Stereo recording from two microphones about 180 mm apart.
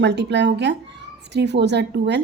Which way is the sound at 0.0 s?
70° right (ahead or behind).